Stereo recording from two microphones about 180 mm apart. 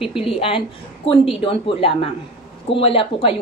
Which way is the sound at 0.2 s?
30° left (ahead or behind).